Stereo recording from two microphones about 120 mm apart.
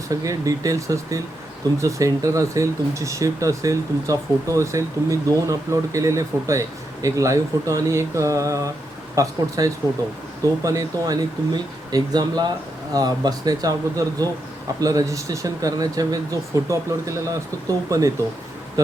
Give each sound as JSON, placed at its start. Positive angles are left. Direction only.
{"t": 0.1, "sound": "speech", "side_deg": -30}